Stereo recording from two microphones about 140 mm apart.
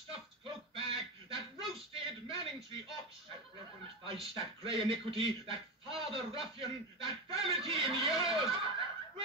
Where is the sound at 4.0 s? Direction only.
40° right (ahead or behind).